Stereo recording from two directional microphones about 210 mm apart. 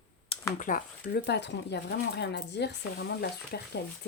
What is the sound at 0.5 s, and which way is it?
Speech, 40° left (ahead or behind).